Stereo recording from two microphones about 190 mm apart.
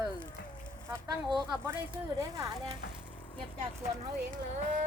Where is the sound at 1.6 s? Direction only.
15° right (ahead or behind).